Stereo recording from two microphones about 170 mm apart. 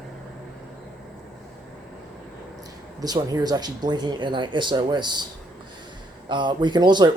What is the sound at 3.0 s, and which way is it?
Speech, 25° right (ahead or behind).